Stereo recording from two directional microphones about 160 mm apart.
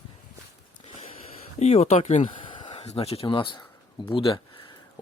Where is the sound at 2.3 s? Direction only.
30° left (ahead or behind).